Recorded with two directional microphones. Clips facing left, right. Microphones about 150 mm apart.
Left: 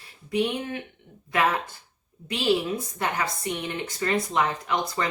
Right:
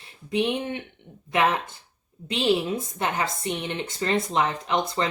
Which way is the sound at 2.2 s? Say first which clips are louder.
Right 1 dB; 25° right (ahead or behind).